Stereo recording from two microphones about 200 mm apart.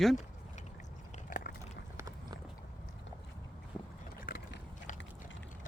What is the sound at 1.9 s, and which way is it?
Clip-clop, 15° right (ahead or behind).